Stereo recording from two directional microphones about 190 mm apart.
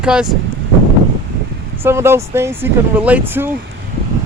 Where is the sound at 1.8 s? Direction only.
15° right (ahead or behind).